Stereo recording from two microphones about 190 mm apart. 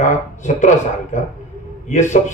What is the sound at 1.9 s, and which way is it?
Speech, 40° left (ahead or behind).